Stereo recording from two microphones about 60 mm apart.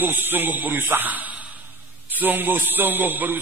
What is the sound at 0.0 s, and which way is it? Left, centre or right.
A man's voice, right.